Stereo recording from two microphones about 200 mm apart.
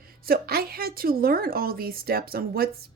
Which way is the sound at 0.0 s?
50° right (ahead or behind).